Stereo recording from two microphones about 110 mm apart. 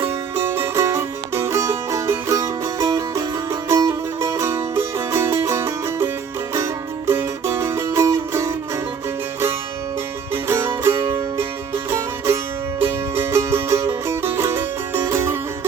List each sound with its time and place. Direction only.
0.0 s music: 20° right (ahead or behind)
7.1 s music: 20° right (ahead or behind)
10.5 s music: 25° right (ahead or behind)